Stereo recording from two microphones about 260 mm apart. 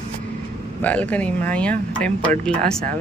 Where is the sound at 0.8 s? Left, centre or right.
Centre.